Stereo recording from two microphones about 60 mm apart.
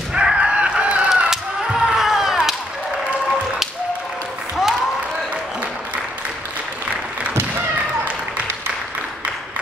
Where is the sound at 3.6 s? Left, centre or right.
Centre.